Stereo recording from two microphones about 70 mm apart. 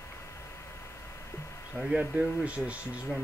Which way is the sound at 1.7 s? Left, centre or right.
Centre.